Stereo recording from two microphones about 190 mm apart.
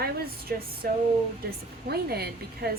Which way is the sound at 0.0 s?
50° right (ahead or behind).